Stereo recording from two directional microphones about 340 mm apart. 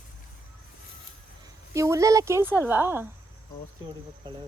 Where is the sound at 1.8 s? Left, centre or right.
Centre.